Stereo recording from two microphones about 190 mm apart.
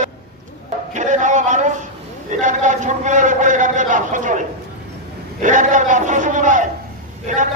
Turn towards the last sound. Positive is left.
turn(degrees=-40)  # may be behind; listen again after turning